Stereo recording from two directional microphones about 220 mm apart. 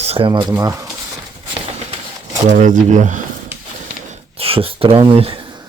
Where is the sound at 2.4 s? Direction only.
35° right (ahead or behind).